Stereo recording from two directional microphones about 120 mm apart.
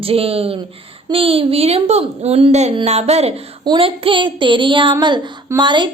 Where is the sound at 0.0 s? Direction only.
50° right (ahead or behind).